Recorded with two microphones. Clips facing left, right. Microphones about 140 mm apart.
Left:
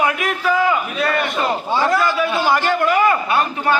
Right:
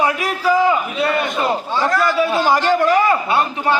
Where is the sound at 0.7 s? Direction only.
25° right (ahead or behind).